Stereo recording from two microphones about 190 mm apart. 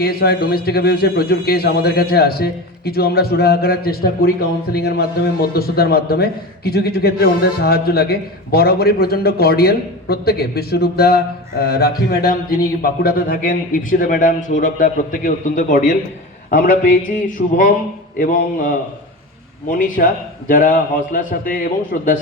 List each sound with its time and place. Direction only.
0.0 s a man's voice: 55° left (ahead or behind)